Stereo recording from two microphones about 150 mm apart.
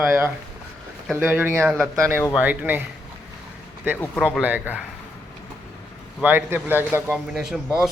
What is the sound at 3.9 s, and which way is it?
Speech, 5° left (ahead or behind).